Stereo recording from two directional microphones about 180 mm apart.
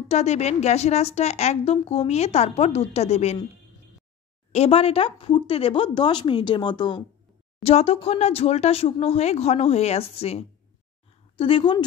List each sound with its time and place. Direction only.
0.1 s a woman's voice: 40° left (ahead or behind)
4.5 s a woman's voice: 35° left (ahead or behind)